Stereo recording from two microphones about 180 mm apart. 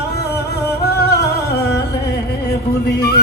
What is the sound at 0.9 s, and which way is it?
Music, 65° left (ahead or behind).